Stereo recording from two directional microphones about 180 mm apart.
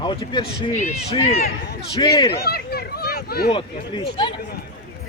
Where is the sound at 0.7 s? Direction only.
40° left (ahead or behind); by 2.3 s 25° left (ahead or behind).